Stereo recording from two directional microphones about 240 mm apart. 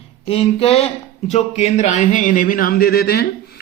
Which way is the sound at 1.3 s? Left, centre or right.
Left.